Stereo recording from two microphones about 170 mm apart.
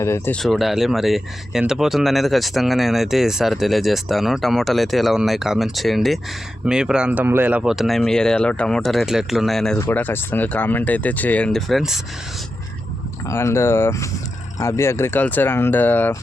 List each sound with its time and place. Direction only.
0.0 s speech: 15° left (ahead or behind)
0.3 s speech: centre (ahead or behind)
9.7 s speech: 10° left (ahead or behind)
13.2 s speech: 15° left (ahead or behind)